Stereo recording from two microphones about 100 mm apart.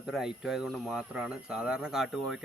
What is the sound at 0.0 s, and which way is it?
Speech, 5° right (ahead or behind).